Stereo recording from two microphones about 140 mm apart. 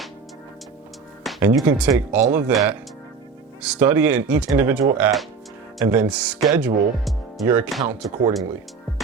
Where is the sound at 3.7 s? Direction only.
15° right (ahead or behind).